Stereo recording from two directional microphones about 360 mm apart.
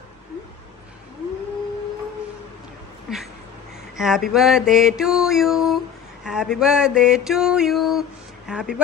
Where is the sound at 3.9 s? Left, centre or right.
Centre.